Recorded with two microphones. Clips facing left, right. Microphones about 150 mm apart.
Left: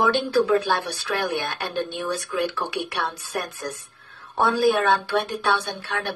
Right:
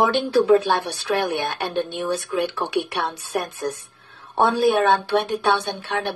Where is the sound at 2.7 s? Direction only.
Centre (ahead or behind).